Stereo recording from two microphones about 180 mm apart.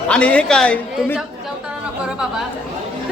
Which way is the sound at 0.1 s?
5° left (ahead or behind).